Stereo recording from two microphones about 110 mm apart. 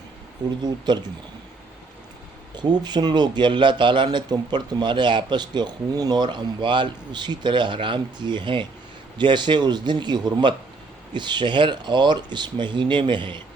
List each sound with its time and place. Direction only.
0.4 s speech: 40° right (ahead or behind)
2.6 s speech: 40° right (ahead or behind)